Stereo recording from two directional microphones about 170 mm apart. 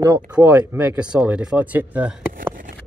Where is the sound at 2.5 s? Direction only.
55° right (ahead or behind).